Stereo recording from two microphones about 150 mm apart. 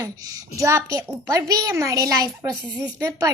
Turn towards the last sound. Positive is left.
turn(degrees=-20)  # may be behind; listen again after turning